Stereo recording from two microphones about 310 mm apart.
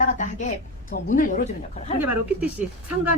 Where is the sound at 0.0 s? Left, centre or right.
Left.